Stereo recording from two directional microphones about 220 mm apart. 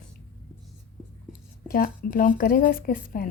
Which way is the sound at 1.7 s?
40° left (ahead or behind).